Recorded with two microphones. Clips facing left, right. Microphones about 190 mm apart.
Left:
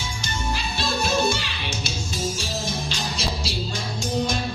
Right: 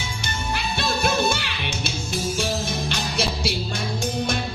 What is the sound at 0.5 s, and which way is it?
Music, 60° right (ahead or behind).